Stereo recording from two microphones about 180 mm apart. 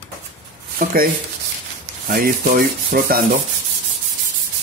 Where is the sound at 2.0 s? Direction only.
50° right (ahead or behind).